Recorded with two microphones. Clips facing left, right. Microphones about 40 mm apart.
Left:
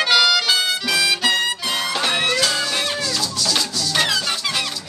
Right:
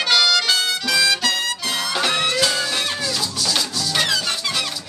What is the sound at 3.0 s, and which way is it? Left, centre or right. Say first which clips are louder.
Music: even; centre.